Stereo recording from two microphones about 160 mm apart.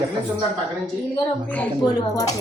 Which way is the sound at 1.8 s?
25° left (ahead or behind).